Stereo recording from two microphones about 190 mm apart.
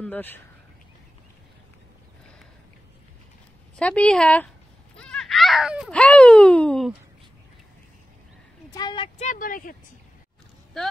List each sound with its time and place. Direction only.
0.0 s speech: 10° left (ahead or behind)
3.7 s a woman's voice: 5° left (ahead or behind)
8.7 s speech: 25° left (ahead or behind)
9.2 s speech: 45° left (ahead or behind)